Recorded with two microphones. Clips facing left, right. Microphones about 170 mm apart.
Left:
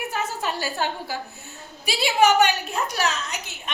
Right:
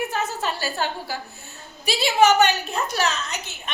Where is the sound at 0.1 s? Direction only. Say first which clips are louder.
Right 1 dB; 15° left (ahead or behind).